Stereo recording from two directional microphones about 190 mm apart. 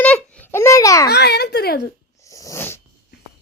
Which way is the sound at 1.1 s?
60° left (ahead or behind).